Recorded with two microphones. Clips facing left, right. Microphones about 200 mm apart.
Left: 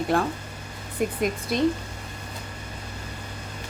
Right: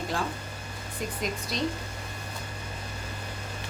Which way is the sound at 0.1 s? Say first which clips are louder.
Left 8 dB; 55° left (ahead or behind).